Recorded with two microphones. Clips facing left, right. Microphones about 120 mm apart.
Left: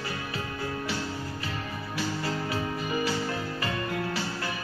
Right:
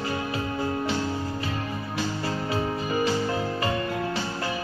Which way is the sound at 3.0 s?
25° right (ahead or behind).